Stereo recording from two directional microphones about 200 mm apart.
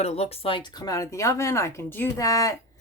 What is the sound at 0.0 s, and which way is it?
Speech, 30° left (ahead or behind).